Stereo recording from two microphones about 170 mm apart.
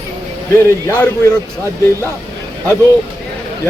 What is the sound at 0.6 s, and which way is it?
Speech, 15° left (ahead or behind).